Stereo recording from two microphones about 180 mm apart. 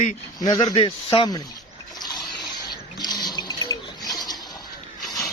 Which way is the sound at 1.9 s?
20° left (ahead or behind).